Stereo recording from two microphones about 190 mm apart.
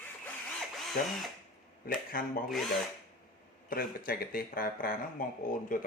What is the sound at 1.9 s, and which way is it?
Speech, 50° left (ahead or behind).